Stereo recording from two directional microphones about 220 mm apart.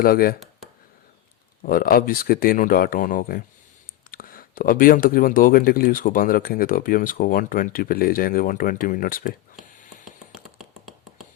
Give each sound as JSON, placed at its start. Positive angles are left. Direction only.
{"t": 0.0, "sound": "speech", "side_deg": 40}
{"t": 1.6, "sound": "speech", "side_deg": 40}
{"t": 10.0, "sound": "tap", "side_deg": 0}